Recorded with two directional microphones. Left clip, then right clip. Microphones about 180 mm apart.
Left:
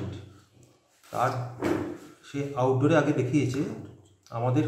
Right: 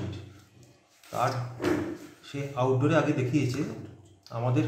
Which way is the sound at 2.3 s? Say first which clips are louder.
Left 2 dB; 10° left (ahead or behind).